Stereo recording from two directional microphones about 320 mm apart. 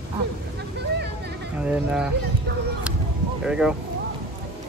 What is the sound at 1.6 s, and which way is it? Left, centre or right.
Speech, centre.